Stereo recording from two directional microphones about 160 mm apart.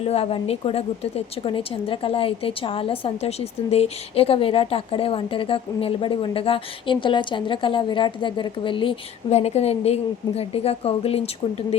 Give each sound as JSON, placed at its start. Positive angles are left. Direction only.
{"t": 0.0, "sound": "a woman's voice", "side_deg": 40}